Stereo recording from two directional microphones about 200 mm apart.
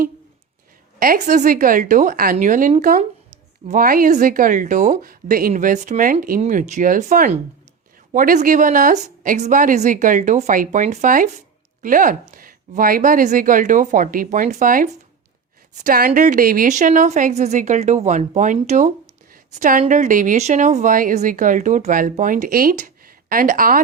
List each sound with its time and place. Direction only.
0.9 s speech: 45° right (ahead or behind)